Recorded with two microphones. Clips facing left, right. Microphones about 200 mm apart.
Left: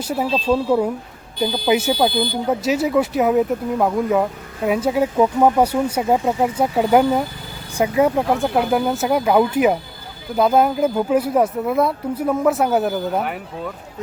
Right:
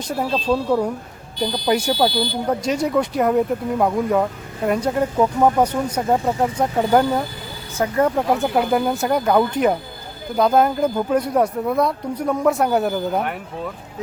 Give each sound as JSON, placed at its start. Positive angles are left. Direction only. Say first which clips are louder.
{"t": 0.0, "sound": "speech", "louder": "left 2 dB", "side_deg": 5}